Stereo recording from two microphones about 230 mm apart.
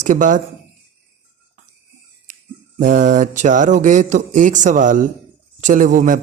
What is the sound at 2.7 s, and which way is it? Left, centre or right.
Speech, right.